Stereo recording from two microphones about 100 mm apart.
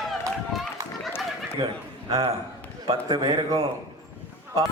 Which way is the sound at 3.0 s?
45° right (ahead or behind).